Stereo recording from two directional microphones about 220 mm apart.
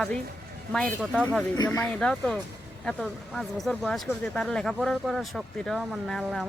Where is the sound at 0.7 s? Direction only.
5° left (ahead or behind).